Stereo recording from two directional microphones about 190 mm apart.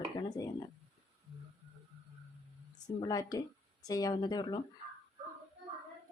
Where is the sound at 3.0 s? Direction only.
20° left (ahead or behind).